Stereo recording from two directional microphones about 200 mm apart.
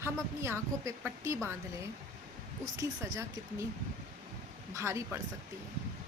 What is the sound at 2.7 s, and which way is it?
Speech, 15° right (ahead or behind).